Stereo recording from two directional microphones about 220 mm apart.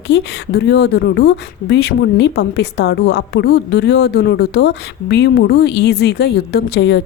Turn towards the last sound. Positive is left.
turn(degrees=50)  # may be behind; listen again after turning